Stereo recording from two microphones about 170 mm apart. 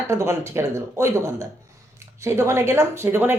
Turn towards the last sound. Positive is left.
turn(degrees=-15)  # may be behind; listen again after turning